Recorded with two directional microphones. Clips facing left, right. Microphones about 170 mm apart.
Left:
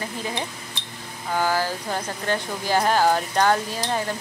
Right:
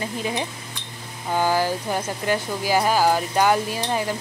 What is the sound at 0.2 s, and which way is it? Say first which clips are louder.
Speech: right 3 dB; 15° right (ahead or behind).